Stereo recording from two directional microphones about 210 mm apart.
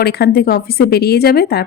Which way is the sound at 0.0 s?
50° left (ahead or behind).